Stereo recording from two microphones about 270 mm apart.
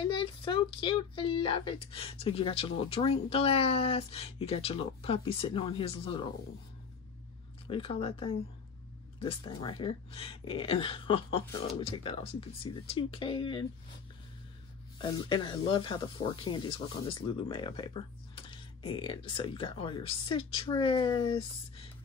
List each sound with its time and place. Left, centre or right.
0.0 s speech: centre
7.7 s speech: left
15.0 s speech: centre